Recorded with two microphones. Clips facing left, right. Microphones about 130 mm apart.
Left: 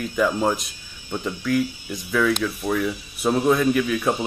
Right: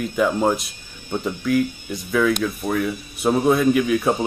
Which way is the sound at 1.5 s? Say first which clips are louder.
Right 2 dB; centre (ahead or behind).